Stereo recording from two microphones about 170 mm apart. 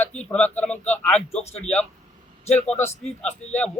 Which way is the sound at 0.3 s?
10° left (ahead or behind).